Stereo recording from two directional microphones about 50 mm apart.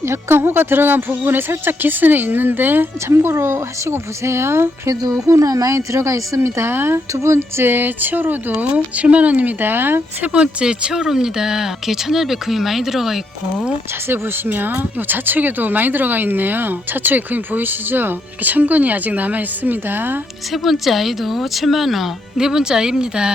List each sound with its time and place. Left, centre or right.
0.0 s speech: right
3.2 s speech: right
7.1 s speech: right
8.5 s speech: right
10.3 s speech: right
14.1 s speech: right
20.5 s speech: centre